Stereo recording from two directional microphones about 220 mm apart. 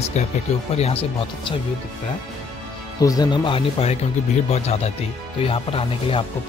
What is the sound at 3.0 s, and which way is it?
Speech, 15° left (ahead or behind).